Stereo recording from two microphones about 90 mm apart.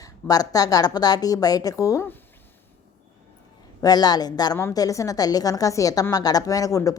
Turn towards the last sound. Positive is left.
turn(degrees=40)  # may be behind; listen again after turning